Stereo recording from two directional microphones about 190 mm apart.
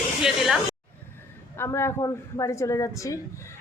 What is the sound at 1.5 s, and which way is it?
Speech, 15° left (ahead or behind).